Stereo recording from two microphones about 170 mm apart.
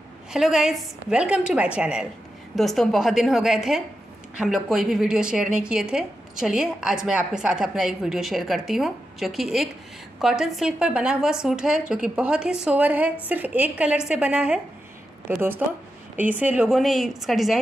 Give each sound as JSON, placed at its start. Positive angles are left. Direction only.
{"t": 0.3, "sound": "a woman's voice", "side_deg": -5}